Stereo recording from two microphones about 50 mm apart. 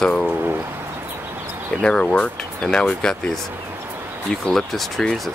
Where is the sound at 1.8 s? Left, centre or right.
Centre.